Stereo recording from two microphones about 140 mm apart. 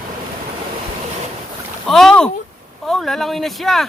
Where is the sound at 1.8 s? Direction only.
5° left (ahead or behind).